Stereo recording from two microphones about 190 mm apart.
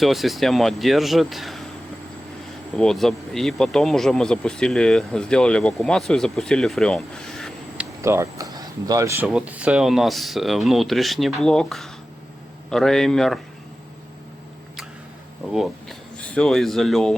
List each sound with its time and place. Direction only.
0.0 s speech: centre (ahead or behind)
2.7 s speech: centre (ahead or behind)
8.0 s speech: 15° right (ahead or behind)
9.2 s speech: 5° right (ahead or behind)
15.5 s speech: centre (ahead or behind)